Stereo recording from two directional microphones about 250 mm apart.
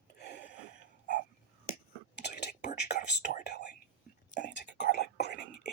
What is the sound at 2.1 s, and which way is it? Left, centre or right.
Whispering, left.